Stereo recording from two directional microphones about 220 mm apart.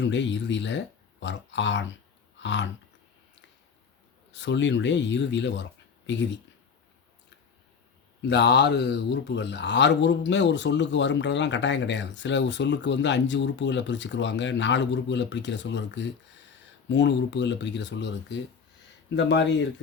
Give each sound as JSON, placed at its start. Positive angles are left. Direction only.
{"t": 0.0, "sound": "speech", "side_deg": 55}
{"t": 4.3, "sound": "speech", "side_deg": 55}
{"t": 8.3, "sound": "speech", "side_deg": 50}